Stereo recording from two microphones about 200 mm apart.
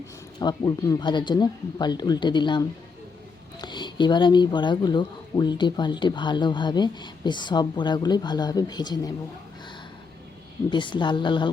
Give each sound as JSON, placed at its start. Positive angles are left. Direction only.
{"t": 0.3, "sound": "speech", "side_deg": 20}
{"t": 10.7, "sound": "speech", "side_deg": 25}